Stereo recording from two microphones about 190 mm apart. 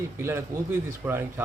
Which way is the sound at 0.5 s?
45° right (ahead or behind).